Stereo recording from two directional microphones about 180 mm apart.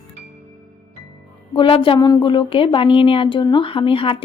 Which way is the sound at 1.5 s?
30° left (ahead or behind).